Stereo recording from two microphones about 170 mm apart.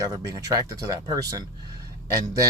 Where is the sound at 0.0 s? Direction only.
20° right (ahead or behind).